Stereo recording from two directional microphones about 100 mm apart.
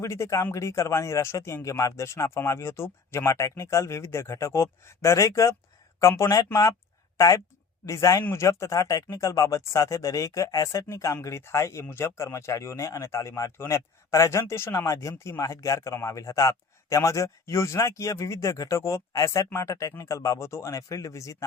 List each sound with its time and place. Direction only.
0.0 s speech: 30° left (ahead or behind)